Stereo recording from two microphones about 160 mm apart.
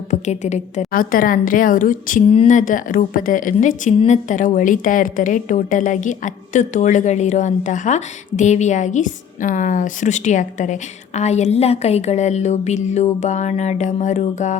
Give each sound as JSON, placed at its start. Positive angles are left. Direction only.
{"t": 0.1, "sound": "a woman's voice", "side_deg": 45}